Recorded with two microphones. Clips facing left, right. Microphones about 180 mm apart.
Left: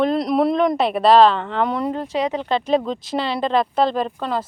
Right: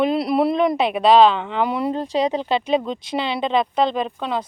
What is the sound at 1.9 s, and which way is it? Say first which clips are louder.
Speech: right 2 dB; 35° right (ahead or behind).